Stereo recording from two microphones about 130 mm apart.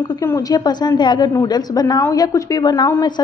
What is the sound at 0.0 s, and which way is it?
A woman's voice, 25° left (ahead or behind).